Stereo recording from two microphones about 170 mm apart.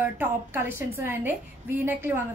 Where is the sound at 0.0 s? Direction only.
10° right (ahead or behind).